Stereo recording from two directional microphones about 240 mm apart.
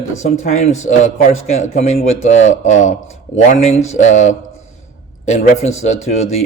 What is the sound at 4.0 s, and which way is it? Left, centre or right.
Speech, left.